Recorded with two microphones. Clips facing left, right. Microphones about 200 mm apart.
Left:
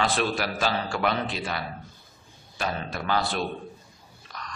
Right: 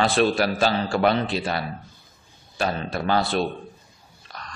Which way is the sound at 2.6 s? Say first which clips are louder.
Right 5 dB; 30° right (ahead or behind).